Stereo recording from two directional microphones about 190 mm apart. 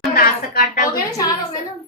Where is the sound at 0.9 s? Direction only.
15° left (ahead or behind).